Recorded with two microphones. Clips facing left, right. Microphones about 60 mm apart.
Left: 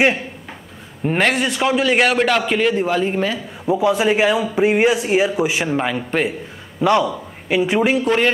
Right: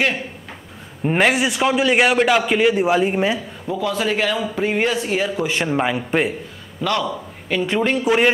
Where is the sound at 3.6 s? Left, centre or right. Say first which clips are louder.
Left 5 dB; left.